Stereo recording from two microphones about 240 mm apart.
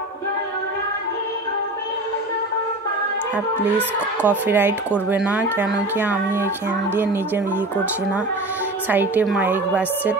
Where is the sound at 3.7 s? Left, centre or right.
Centre.